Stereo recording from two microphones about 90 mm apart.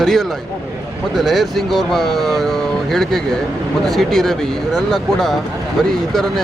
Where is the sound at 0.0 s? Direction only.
5° left (ahead or behind).